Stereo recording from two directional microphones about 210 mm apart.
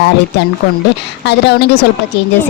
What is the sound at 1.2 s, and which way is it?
Speech, 55° left (ahead or behind).